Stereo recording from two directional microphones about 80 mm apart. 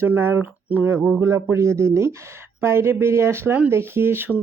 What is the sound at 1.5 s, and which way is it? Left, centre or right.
Speech, right.